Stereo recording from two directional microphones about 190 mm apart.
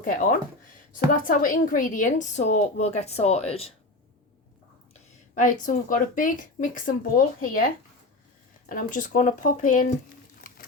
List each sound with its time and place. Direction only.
0.0 s a woman's voice: 50° left (ahead or behind); by 3.8 s 30° left (ahead or behind)
4.9 s speech: 40° left (ahead or behind)
8.7 s speech: 45° left (ahead or behind)